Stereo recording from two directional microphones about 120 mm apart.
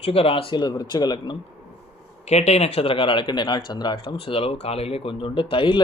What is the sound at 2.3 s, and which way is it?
Speech, 65° left (ahead or behind).